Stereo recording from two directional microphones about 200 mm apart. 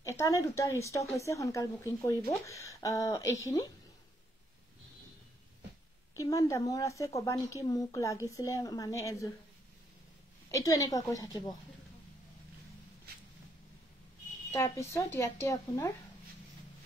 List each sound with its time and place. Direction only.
0.0 s speech: 15° left (ahead or behind)
6.1 s speech: 15° left (ahead or behind)
10.5 s speech: 15° left (ahead or behind)
14.5 s speech: 15° left (ahead or behind)